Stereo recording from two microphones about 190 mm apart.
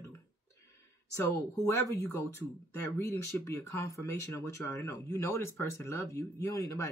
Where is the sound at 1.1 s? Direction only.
15° left (ahead or behind).